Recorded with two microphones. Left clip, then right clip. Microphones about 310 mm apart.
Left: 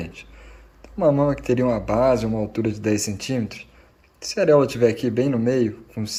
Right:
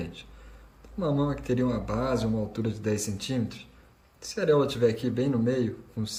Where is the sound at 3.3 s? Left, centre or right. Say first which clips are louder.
Left 6 dB; left.